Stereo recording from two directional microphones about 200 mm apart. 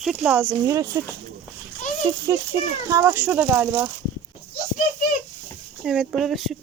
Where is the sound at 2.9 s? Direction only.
10° right (ahead or behind).